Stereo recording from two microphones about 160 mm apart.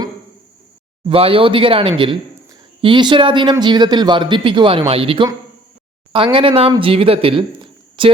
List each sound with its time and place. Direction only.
1.0 s a man's voice: 35° right (ahead or behind)